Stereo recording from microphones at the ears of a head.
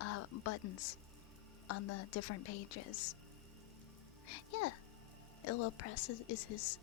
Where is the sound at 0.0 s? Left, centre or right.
Left.